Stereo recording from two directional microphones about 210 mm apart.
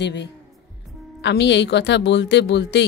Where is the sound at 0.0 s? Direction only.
55° left (ahead or behind).